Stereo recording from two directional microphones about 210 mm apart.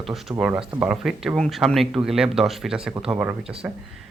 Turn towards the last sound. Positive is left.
turn(degrees=-5)  # may be behind; listen again after turning